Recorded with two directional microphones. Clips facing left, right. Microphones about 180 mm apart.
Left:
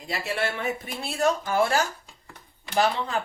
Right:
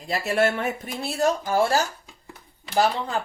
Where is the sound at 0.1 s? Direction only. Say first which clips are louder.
Right 6 dB; 45° right (ahead or behind).